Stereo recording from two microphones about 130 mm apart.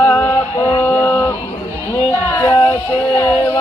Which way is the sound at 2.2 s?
20° left (ahead or behind).